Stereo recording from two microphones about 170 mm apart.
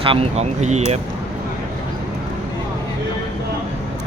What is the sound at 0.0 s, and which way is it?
Speech, 35° right (ahead or behind).